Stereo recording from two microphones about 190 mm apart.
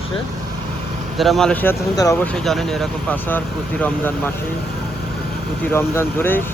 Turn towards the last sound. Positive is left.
turn(degrees=10)  # may be behind; listen again after turning